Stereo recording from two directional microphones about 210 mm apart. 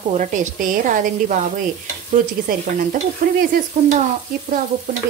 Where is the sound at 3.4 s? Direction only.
40° right (ahead or behind).